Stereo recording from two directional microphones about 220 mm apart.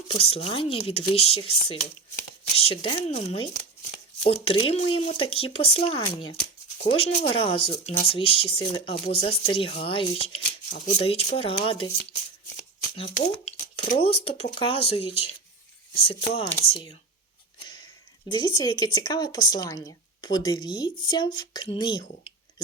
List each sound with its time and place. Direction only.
0.1 s a woman's voice: 25° left (ahead or behind)
2.6 s a woman's voice: 25° left (ahead or behind)
13.0 s a woman's voice: 30° left (ahead or behind)
16.5 s a woman's voice: 25° left (ahead or behind)
18.3 s a woman's voice: 20° left (ahead or behind)